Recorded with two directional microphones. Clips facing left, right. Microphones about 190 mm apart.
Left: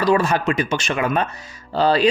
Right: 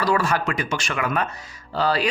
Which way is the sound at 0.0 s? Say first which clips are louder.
Left 4 dB; 20° left (ahead or behind).